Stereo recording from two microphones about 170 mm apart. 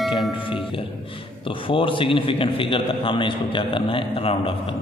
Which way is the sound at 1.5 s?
30° left (ahead or behind).